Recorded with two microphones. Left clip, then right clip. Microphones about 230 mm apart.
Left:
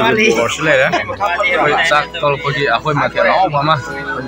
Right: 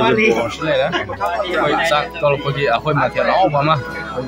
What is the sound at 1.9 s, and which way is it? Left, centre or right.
Speech, centre.